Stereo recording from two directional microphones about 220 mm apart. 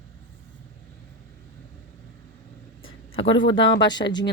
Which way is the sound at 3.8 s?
20° left (ahead or behind).